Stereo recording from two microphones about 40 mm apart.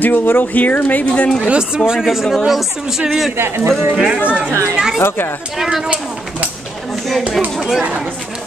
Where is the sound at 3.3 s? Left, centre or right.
Right.